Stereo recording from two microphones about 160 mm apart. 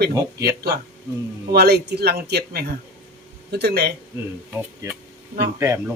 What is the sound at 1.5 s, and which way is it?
A man's voice, 90° right.